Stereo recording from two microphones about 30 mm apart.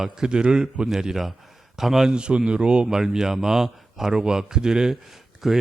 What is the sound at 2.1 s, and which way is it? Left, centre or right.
Speech, right.